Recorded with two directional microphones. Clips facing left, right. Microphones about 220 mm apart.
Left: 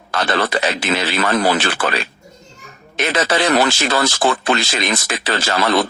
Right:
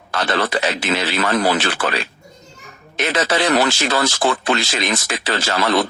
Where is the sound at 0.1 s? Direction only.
50° left (ahead or behind).